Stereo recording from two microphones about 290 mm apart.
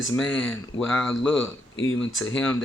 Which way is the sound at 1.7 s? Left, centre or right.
Left.